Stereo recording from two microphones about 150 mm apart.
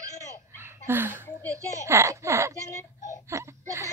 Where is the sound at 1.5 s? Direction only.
20° right (ahead or behind).